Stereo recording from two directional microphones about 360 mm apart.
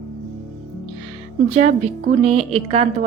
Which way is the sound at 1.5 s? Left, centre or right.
Centre.